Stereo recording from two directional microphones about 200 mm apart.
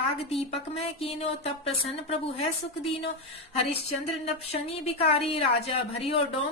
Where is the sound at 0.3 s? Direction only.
30° left (ahead or behind).